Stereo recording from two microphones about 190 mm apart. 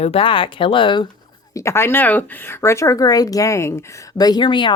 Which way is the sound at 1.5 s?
15° left (ahead or behind).